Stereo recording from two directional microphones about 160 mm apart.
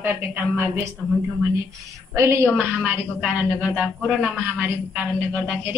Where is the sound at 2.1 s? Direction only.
15° right (ahead or behind).